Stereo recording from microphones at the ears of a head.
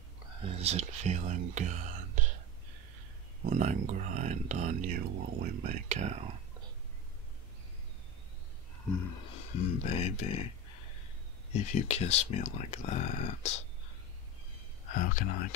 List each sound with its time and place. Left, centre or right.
0.4 s speech: right
3.4 s speech: right
9.0 s a sound: left
11.5 s speech: left
14.9 s speech: left